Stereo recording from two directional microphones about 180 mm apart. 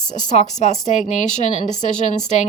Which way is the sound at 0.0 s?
40° left (ahead or behind).